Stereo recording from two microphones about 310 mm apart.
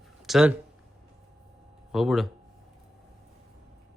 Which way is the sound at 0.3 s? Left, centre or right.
Centre.